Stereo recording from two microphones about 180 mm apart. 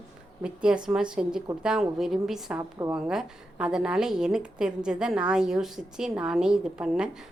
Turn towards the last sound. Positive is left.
turn(degrees=-5)  # may be behind; listen again after turning